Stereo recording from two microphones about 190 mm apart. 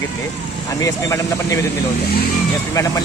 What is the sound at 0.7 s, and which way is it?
Speech, 15° left (ahead or behind).